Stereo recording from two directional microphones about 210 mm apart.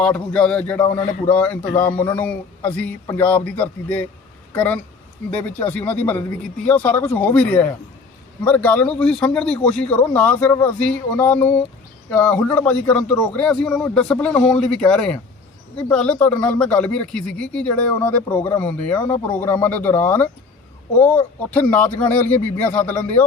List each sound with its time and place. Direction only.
0.0 s speech: 5° left (ahead or behind)